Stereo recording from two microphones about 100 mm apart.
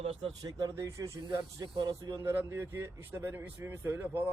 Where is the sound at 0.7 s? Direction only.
30° right (ahead or behind).